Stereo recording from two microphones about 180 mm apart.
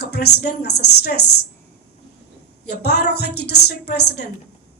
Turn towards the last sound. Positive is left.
turn(degrees=65)  # may be behind; listen again after turning